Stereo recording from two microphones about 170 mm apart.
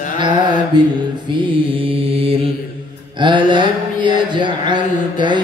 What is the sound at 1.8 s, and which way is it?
Mantra, 35° right (ahead or behind).